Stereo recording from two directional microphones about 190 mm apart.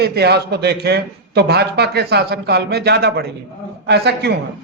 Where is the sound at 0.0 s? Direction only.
60° right (ahead or behind).